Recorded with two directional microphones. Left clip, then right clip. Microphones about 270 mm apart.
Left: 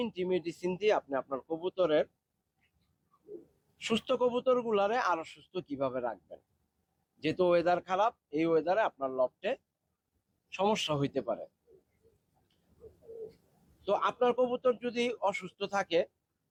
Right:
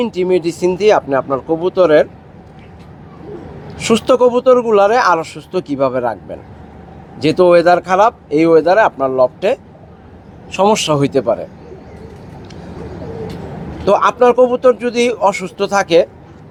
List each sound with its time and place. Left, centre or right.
0.0 s speech: left
3.8 s speech: left
7.2 s speech: left
13.8 s speech: left